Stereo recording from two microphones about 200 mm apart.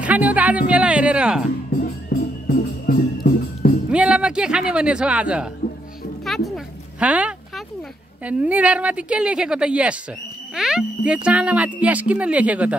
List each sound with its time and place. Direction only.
0.0 s music: 5° right (ahead or behind)
2.4 s music: 45° left (ahead or behind)
3.9 s speech: 5° right (ahead or behind)
6.2 s a sound: centre (ahead or behind)
8.3 s a woman's voice: 5° right (ahead or behind)
10.5 s a sound: 5° right (ahead or behind)
11.2 s speech: 5° right (ahead or behind)